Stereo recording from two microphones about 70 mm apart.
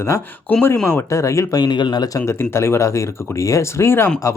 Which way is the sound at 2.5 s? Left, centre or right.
Left.